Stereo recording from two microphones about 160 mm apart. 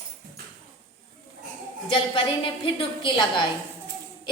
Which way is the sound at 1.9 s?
35° left (ahead or behind).